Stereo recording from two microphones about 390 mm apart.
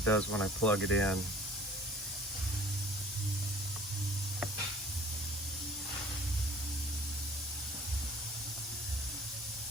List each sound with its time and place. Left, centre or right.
0.0 s speech: centre